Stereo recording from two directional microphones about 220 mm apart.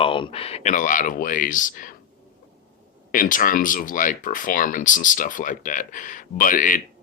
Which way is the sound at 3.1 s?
40° left (ahead or behind).